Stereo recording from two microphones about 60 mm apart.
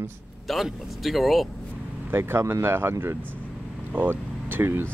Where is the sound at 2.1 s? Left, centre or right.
Right.